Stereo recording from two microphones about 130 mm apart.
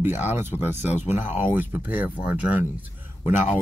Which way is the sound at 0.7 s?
65° left (ahead or behind).